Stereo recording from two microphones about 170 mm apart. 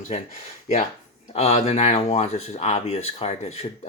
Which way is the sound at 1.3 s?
40° left (ahead or behind).